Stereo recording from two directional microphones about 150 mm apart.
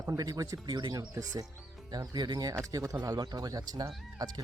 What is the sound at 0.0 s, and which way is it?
Speech, 20° right (ahead or behind).